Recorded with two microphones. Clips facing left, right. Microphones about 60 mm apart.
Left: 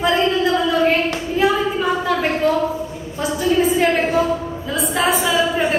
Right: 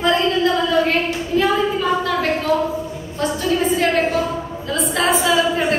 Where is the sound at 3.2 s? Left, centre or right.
Centre.